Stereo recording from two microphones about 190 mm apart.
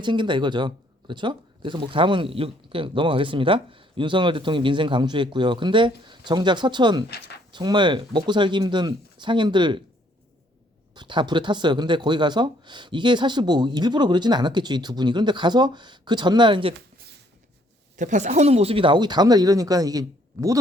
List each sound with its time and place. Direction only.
0.0 s speech: 25° right (ahead or behind)
10.9 s speech: 25° right (ahead or behind)
17.9 s speech: 40° right (ahead or behind); by 20.6 s 20° right (ahead or behind)